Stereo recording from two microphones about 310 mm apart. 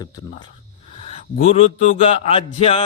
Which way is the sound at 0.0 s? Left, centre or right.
Centre.